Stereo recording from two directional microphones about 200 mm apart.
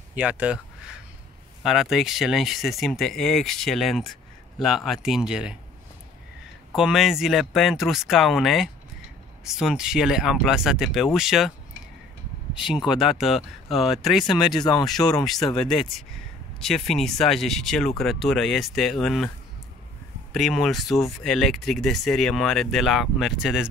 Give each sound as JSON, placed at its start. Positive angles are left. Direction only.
{"t": 0.1, "sound": "speech", "side_deg": -5}
{"t": 6.7, "sound": "speech", "side_deg": 0}
{"t": 12.5, "sound": "speech", "side_deg": -5}
{"t": 14.6, "sound": "speech", "side_deg": 20}
{"t": 15.2, "sound": "speech", "side_deg": 0}
{"t": 20.3, "sound": "speech", "side_deg": 0}